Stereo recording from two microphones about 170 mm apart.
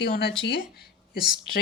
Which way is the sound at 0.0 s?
70° left (ahead or behind).